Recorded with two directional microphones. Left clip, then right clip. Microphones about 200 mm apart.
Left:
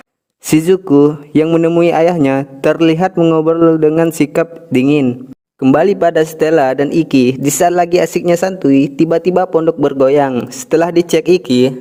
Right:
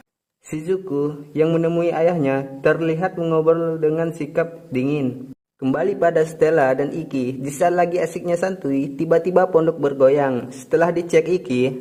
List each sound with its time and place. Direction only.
0.5 s a man's voice: 50° left (ahead or behind)
1.5 s a man's voice: 40° left (ahead or behind); by 5.0 s 55° left (ahead or behind)
5.7 s speech: 40° left (ahead or behind)